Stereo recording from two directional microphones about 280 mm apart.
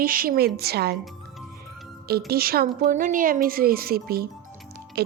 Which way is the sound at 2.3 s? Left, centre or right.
Right.